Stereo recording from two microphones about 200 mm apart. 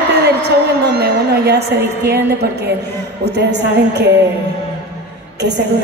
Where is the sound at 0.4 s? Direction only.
55° right (ahead or behind).